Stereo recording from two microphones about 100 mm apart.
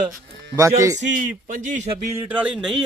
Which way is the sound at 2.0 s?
25° right (ahead or behind).